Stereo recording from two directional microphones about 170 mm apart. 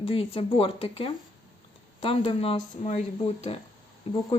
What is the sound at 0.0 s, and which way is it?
Speech, 30° left (ahead or behind).